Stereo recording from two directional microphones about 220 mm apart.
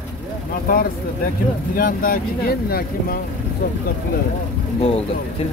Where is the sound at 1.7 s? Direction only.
40° left (ahead or behind).